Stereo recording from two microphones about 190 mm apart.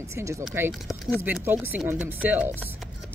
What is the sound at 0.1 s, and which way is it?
Speech, 15° right (ahead or behind).